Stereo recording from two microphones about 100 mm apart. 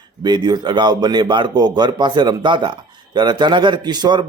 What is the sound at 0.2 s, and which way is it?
A man's voice, 45° right (ahead or behind).